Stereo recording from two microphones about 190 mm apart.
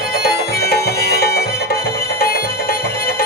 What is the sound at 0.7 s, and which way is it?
Music, 55° left (ahead or behind).